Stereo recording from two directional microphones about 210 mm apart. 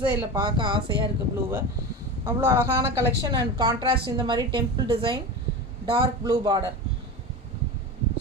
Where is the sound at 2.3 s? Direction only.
10° right (ahead or behind).